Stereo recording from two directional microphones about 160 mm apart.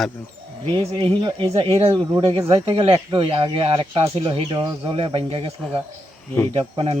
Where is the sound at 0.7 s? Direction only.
35° right (ahead or behind).